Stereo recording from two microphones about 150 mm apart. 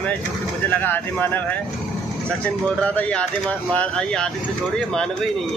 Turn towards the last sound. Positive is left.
turn(degrees=5)  # may be behind; listen again after turning